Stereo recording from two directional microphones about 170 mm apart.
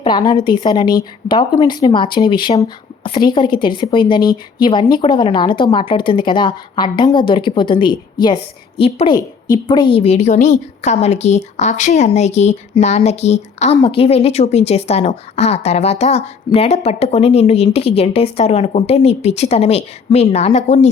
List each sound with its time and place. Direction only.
0.0 s a woman's voice: 25° left (ahead or behind)